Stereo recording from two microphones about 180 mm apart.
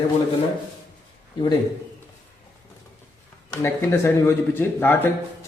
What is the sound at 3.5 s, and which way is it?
Speech, 15° left (ahead or behind).